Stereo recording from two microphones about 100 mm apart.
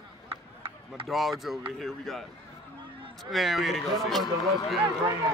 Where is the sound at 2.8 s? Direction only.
60° right (ahead or behind).